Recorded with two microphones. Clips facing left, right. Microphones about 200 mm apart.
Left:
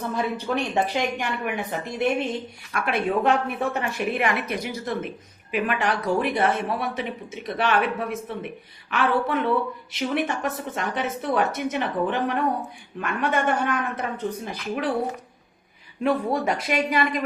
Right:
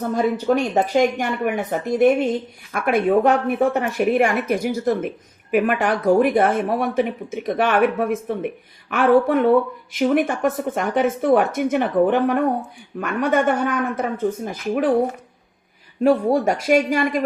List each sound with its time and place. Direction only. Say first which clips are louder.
0.0 s a woman's voice: right 7 dB; 40° right (ahead or behind)
16.0 s a woman's voice: right 6 dB; 45° right (ahead or behind)